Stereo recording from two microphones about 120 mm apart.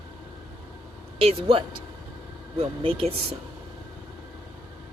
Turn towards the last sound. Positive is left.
turn(degrees=-50)  # may be behind; listen again after turning